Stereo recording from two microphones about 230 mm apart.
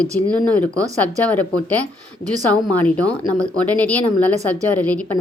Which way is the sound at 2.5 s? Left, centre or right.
Centre.